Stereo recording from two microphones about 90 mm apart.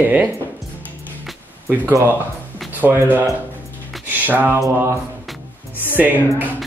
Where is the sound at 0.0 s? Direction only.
20° right (ahead or behind).